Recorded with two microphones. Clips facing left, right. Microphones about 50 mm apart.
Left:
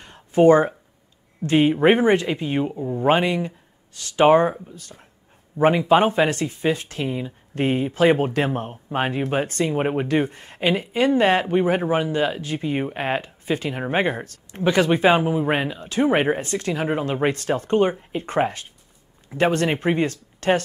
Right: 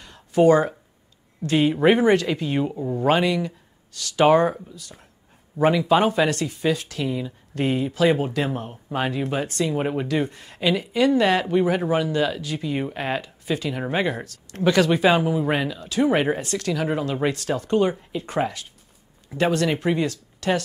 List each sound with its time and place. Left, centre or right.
0.0 s a sound: left
1.4 s speech: left
2.7 s speech: centre
3.0 s speech: left
4.6 s speech: left
14.5 s speech: left